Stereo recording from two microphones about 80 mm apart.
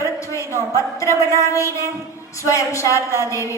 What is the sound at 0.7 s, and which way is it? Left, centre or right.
A woman's voice, left.